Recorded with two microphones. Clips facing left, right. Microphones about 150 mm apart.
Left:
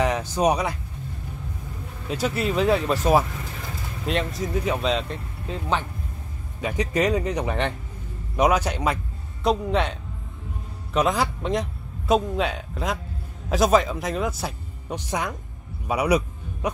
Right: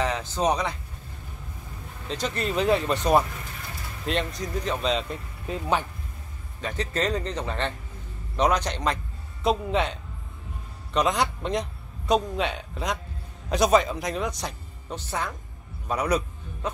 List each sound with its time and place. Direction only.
0.0 s speech: 15° left (ahead or behind)
2.0 s speech: 10° left (ahead or behind)
5.5 s speech: 10° right (ahead or behind)
6.6 s a man's voice: 10° left (ahead or behind)